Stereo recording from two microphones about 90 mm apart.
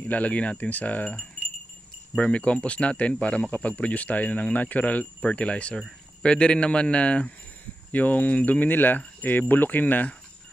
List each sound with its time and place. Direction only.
0.0 s speech: 15° left (ahead or behind)
7.9 s cricket: 20° left (ahead or behind)